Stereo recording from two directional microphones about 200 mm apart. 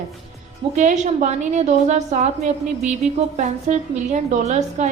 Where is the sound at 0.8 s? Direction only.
35° right (ahead or behind).